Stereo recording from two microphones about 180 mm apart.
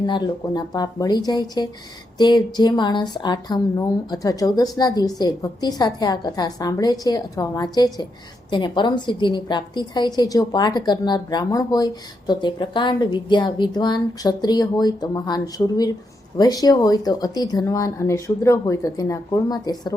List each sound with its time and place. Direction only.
0.0 s a woman's voice: 25° left (ahead or behind)